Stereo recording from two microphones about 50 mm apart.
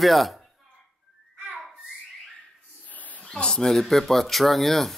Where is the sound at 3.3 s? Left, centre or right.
Centre.